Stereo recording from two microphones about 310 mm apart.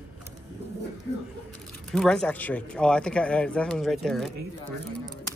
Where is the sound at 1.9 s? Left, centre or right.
Centre.